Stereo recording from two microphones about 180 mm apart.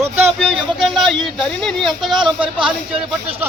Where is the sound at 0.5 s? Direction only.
Centre (ahead or behind).